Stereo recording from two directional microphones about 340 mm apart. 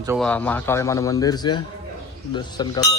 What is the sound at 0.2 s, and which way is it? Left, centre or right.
A man's voice, centre.